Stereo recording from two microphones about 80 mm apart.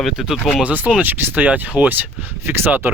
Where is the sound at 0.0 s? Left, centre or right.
Centre.